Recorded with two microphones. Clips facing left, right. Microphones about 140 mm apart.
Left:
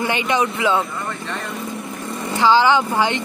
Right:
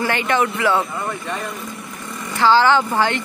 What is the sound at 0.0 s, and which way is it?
Speech, 20° left (ahead or behind).